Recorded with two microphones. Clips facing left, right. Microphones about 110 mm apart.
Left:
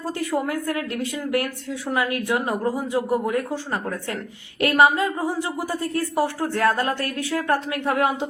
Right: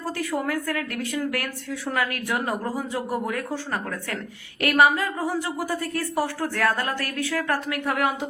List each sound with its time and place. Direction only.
0.2 s speech: 20° left (ahead or behind)
1.9 s speech: 20° left (ahead or behind)
4.6 s speech: 25° left (ahead or behind)